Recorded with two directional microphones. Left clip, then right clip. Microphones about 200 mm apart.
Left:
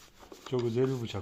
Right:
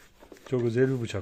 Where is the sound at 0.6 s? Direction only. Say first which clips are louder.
Right 5 dB; 50° right (ahead or behind).